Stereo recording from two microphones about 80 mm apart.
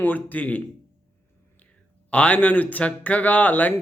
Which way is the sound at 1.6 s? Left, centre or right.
Centre.